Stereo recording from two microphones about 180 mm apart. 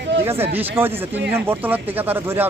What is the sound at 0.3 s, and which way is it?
Speech, 10° right (ahead or behind).